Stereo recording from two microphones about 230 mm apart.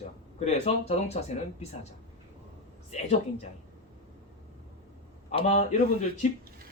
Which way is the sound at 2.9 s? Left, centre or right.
Left.